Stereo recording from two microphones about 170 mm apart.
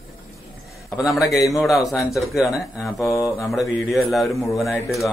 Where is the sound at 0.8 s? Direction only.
Centre (ahead or behind).